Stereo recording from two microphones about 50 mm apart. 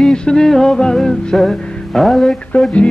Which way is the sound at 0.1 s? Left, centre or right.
Centre.